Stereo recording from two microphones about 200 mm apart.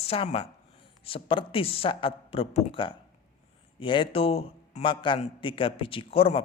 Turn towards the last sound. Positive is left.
turn(degrees=30)  # may be behind; listen again after turning